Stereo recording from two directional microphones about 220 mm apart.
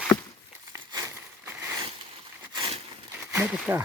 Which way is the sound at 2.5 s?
25° right (ahead or behind).